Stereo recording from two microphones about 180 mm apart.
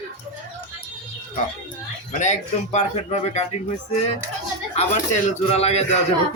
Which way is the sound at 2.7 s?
35° left (ahead or behind).